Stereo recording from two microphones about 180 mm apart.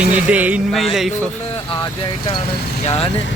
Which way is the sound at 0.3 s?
5° right (ahead or behind).